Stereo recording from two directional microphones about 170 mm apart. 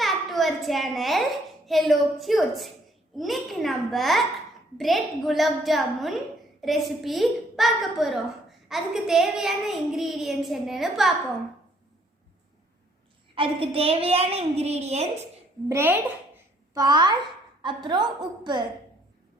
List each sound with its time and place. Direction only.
0.0 s a sound: centre (ahead or behind)
1.6 s a woman's voice: centre (ahead or behind)
13.3 s a woman's voice: 30° right (ahead or behind)
15.7 s a woman's voice: 10° right (ahead or behind)
16.7 s a woman's voice: 25° right (ahead or behind)